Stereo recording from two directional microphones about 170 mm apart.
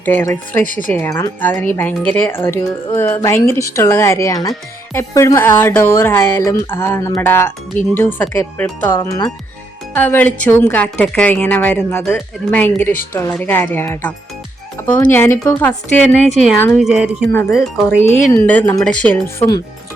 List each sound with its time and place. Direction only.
0.0 s speech: 10° left (ahead or behind)
0.6 s speech: 50° left (ahead or behind)
0.9 s speech: 10° left (ahead or behind)
9.9 s speech: 10° left (ahead or behind)
16.8 s a woman's voice: 5° right (ahead or behind)
18.3 s speech: 10° left (ahead or behind)